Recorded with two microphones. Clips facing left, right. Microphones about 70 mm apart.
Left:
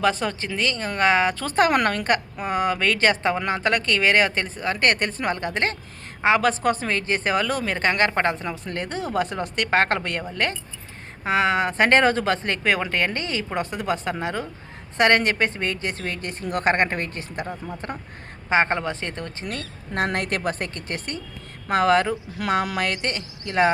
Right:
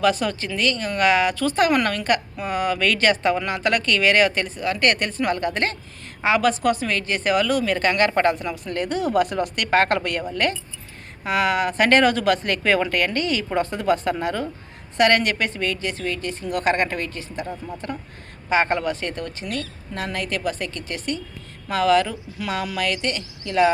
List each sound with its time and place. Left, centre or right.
0.0 s speech: left
12.6 s a woman's voice: centre; by 17.4 s left
17.4 s speech: left
19.9 s a woman's voice: left